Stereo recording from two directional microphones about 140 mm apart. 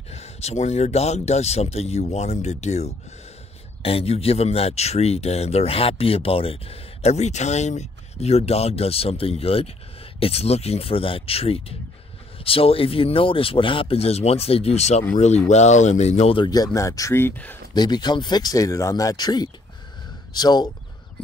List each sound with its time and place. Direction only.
0.1 s speech: 50° left (ahead or behind)
3.8 s speech: 45° left (ahead or behind)
16.3 s speech: 25° left (ahead or behind)
17.7 s speech: 30° left (ahead or behind)